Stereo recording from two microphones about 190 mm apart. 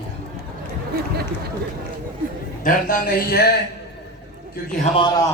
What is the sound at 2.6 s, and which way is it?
Speech, 45° left (ahead or behind).